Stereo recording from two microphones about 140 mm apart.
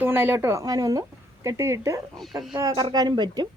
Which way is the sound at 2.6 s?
25° right (ahead or behind).